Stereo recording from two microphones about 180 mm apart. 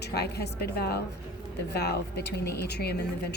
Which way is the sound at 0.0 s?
65° left (ahead or behind).